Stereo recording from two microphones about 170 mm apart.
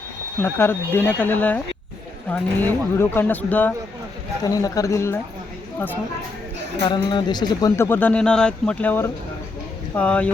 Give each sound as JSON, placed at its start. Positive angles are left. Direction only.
{"t": 0.4, "sound": "speech", "side_deg": 10}
{"t": 4.4, "sound": "speech", "side_deg": 20}
{"t": 6.8, "sound": "speech", "side_deg": 25}